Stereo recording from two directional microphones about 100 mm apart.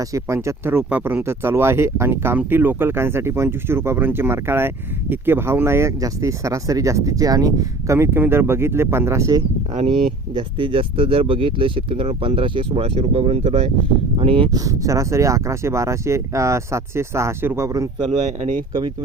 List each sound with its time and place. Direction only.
0.4 s speech: 25° right (ahead or behind)
7.9 s speech: 25° right (ahead or behind)
10.6 s speech: 65° right (ahead or behind); by 13.7 s 90° right
14.2 s speech: 70° right (ahead or behind)
14.5 s speech: 35° right (ahead or behind)